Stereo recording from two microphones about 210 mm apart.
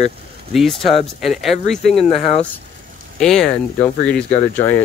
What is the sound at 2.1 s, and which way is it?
Speech, 30° left (ahead or behind).